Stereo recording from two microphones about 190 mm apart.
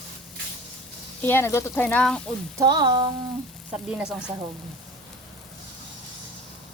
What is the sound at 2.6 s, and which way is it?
Speech, 20° right (ahead or behind).